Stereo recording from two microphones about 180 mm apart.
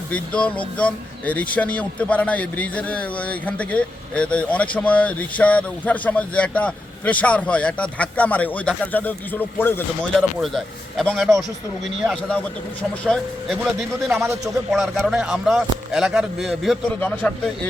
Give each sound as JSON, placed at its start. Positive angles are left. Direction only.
{"t": 0.1, "sound": "a man's voice", "side_deg": 5}
{"t": 10.4, "sound": "speech", "side_deg": 0}
{"t": 14.1, "sound": "a man's voice", "side_deg": -15}
{"t": 14.7, "sound": "speech", "side_deg": 0}